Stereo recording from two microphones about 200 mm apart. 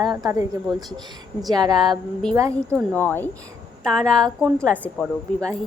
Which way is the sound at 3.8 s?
5° left (ahead or behind).